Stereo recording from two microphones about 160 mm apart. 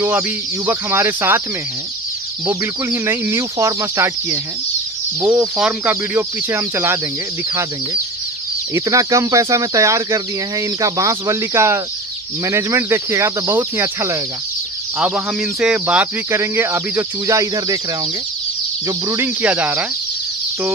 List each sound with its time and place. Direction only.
0.7 s speech: 15° right (ahead or behind)
2.4 s speech: 10° right (ahead or behind)
5.6 s speech: 10° right (ahead or behind)
8.7 s speech: 20° right (ahead or behind)
18.9 s speech: 15° right (ahead or behind)